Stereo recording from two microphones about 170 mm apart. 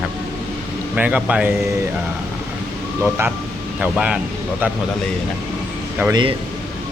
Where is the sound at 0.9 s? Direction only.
10° right (ahead or behind).